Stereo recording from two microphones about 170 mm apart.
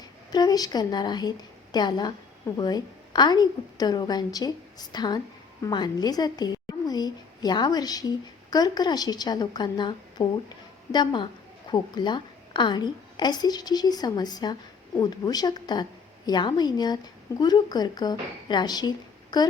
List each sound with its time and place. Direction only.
0.3 s a woman's voice: 25° left (ahead or behind)